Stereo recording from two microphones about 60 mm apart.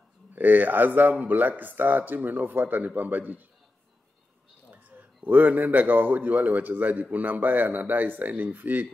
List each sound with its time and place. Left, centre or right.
0.3 s speech: right
4.6 s a man's voice: right